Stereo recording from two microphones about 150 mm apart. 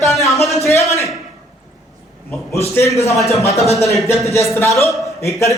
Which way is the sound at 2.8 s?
20° left (ahead or behind).